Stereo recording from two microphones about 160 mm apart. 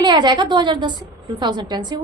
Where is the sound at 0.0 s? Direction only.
30° right (ahead or behind).